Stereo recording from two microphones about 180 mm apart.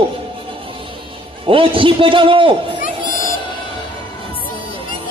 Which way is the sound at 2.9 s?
25° right (ahead or behind).